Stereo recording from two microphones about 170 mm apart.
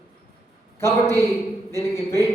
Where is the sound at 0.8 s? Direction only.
15° left (ahead or behind).